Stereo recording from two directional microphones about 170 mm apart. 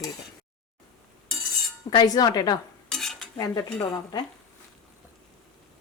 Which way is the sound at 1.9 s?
25° left (ahead or behind).